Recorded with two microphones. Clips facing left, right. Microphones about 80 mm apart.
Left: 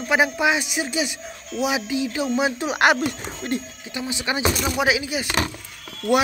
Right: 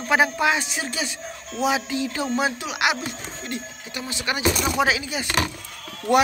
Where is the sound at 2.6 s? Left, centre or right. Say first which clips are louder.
Left 6 dB; left.